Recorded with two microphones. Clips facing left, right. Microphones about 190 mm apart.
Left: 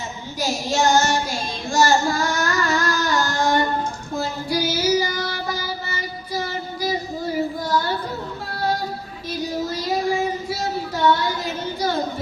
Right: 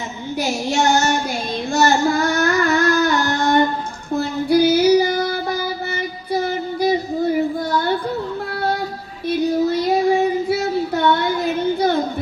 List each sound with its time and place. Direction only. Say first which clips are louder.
0.3 s female singing: right 2 dB; 65° right (ahead or behind)
1.7 s singing: right 2 dB; 60° right (ahead or behind)
4.1 s child singing: right 9 dB; 60° right (ahead or behind)
9.2 s child singing: right 9 dB; 55° right (ahead or behind)